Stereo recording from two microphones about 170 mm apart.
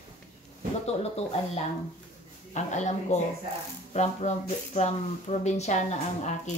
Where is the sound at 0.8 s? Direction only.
40° left (ahead or behind).